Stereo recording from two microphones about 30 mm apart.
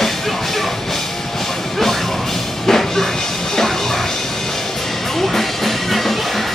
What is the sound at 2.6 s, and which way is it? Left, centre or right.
Music, centre.